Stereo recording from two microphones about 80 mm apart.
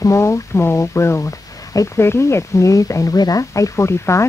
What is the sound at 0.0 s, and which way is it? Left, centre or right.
Speech, left.